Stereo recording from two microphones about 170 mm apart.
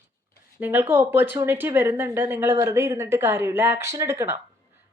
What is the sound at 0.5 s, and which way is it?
Speech, 10° right (ahead or behind).